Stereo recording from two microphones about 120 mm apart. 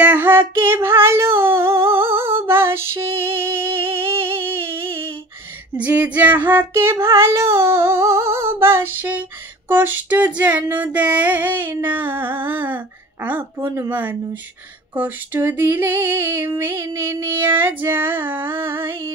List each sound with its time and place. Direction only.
0.0 s female singing: 15° right (ahead or behind)
3.2 s music: 20° right (ahead or behind)
5.8 s female singing: 10° right (ahead or behind)